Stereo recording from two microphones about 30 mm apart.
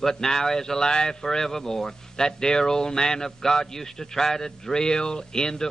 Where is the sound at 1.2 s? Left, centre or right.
Centre.